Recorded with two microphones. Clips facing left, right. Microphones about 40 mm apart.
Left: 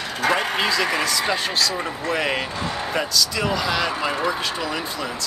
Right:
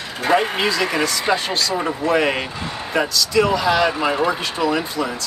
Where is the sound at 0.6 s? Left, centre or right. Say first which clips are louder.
Right 2 dB; centre.